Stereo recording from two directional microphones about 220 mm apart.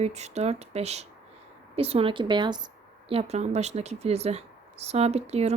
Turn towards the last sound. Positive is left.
turn(degrees=-30)  # may be behind; listen again after turning